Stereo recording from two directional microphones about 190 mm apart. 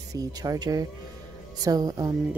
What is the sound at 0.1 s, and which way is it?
Speech, 20° right (ahead or behind).